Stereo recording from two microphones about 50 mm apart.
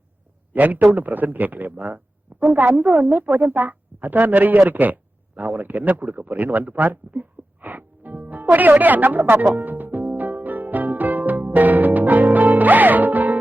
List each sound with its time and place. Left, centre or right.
0.5 s a man's voice: right
9.6 s music: right